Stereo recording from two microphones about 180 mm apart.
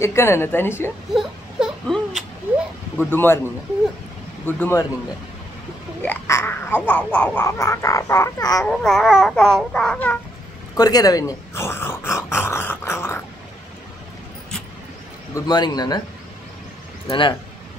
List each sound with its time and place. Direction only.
0.0 s speech: 15° left (ahead or behind)
1.1 s a sound: centre (ahead or behind)
3.0 s speech: 10° left (ahead or behind)
4.6 s speech: 15° left (ahead or behind)
6.0 s speech: 15° left (ahead or behind)
8.6 s babbling: centre (ahead or behind)
10.8 s dog: 20° left (ahead or behind)
15.3 s speech: 20° left (ahead or behind)
17.1 s speech: 30° left (ahead or behind)